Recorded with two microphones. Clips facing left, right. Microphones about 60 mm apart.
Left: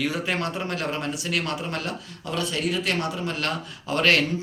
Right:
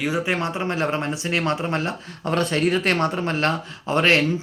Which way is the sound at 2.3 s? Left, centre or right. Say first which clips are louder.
Right 6 dB; right.